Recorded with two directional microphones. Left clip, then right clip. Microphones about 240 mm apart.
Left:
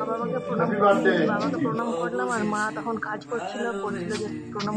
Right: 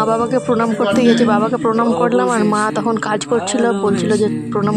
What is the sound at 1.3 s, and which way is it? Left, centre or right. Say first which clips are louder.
Speech: right 11 dB; right.